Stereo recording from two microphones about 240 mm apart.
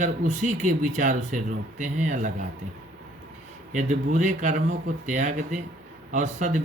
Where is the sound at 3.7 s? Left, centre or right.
Right.